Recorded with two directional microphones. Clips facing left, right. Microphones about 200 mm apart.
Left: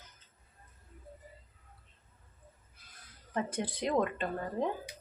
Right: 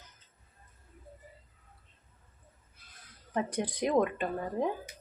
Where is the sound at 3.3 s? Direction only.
15° right (ahead or behind).